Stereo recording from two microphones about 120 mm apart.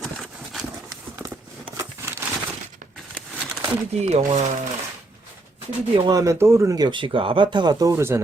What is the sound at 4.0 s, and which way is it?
Speech, 60° right (ahead or behind).